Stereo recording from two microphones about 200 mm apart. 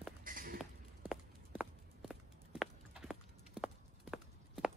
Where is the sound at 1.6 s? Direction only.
5° right (ahead or behind).